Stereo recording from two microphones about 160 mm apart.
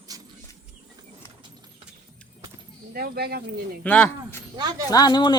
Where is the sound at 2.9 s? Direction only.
75° right (ahead or behind).